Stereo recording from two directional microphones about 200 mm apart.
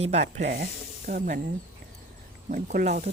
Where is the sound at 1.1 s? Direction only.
45° right (ahead or behind).